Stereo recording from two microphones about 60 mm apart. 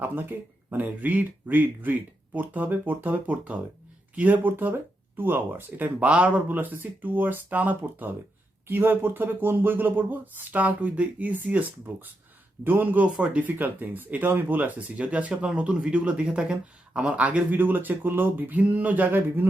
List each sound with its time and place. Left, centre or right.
0.0 s speech: right
6.1 s speech: right
13.1 s speech: centre